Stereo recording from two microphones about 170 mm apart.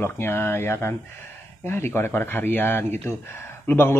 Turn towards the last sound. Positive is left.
turn(degrees=15)  # may be behind; listen again after turning